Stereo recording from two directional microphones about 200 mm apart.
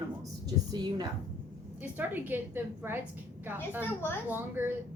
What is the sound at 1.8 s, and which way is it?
Speech, 10° right (ahead or behind).